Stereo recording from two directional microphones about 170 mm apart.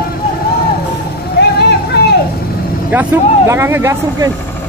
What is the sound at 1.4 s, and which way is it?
Vehicle, 70° left (ahead or behind).